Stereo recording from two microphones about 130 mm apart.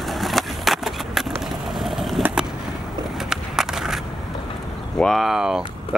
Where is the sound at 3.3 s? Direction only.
5° right (ahead or behind).